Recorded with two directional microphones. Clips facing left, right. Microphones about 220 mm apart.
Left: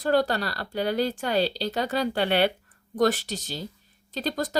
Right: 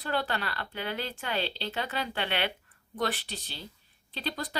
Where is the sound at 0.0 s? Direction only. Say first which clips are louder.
Left 9 dB; 40° left (ahead or behind).